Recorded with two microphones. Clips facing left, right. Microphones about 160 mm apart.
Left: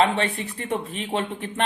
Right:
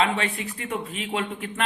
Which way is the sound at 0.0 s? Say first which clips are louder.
Left 3 dB; 35° left (ahead or behind).